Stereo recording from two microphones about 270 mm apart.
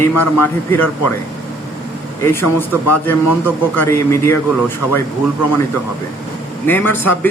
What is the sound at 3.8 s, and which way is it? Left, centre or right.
Speech, centre.